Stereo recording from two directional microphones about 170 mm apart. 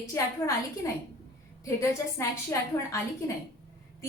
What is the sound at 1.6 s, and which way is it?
A woman's voice, 15° left (ahead or behind).